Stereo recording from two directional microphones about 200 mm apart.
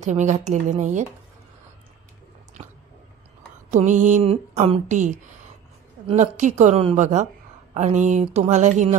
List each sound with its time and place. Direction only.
0.0 s speech: 35° right (ahead or behind)
3.7 s speech: 40° right (ahead or behind)